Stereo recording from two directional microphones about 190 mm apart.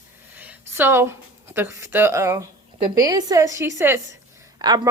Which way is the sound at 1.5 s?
15° right (ahead or behind).